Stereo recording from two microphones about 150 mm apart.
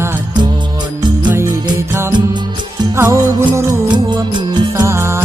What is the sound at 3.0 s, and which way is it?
Music, 20° right (ahead or behind).